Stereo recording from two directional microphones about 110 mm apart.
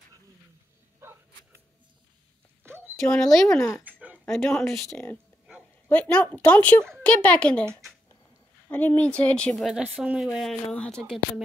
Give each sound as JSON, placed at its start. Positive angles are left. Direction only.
{"t": 1.0, "sound": "a sound", "side_deg": -20}
{"t": 2.6, "sound": "a sound", "side_deg": -20}
{"t": 3.1, "sound": "speech", "side_deg": 5}
{"t": 3.8, "sound": "dog", "side_deg": -15}
{"t": 4.3, "sound": "speech", "side_deg": 5}
{"t": 8.6, "sound": "speech", "side_deg": 15}
{"t": 10.7, "sound": "speech", "side_deg": 10}